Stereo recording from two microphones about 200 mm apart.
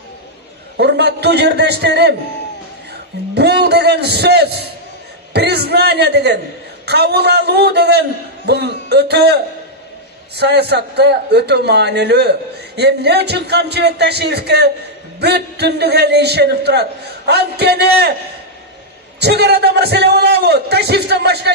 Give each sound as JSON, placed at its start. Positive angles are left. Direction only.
{"t": 0.7, "sound": "a man's voice", "side_deg": -55}
{"t": 3.3, "sound": "a man's voice", "side_deg": -55}
{"t": 19.1, "sound": "a man's voice", "side_deg": -55}